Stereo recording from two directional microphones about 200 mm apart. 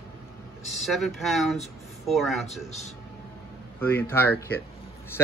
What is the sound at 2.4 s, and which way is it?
Speech, 35° left (ahead or behind).